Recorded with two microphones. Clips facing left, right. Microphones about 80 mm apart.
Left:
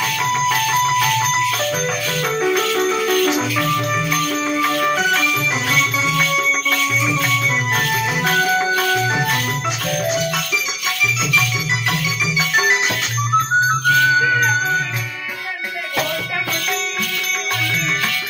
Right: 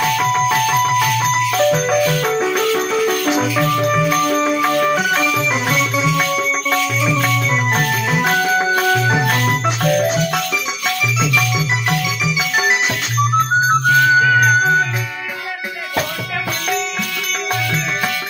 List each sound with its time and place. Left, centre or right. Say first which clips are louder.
1.5 s music: right 6 dB; centre
9.2 s jingle bell: right 3 dB; right